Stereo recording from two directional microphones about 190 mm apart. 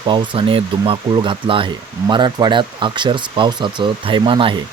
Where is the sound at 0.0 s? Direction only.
25° right (ahead or behind).